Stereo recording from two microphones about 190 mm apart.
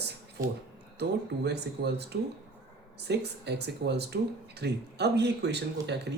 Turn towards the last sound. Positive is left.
turn(degrees=-60)  # may be behind; listen again after turning